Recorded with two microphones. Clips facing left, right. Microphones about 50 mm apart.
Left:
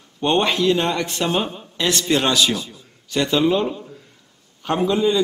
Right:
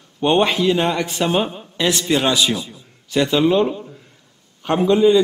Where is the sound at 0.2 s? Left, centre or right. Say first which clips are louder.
Right 2 dB; centre.